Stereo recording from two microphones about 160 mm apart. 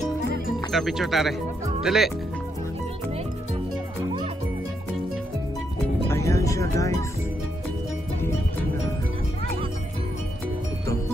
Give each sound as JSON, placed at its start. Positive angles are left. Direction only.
{"t": 0.7, "sound": "speech", "side_deg": 0}
{"t": 6.0, "sound": "music", "side_deg": 20}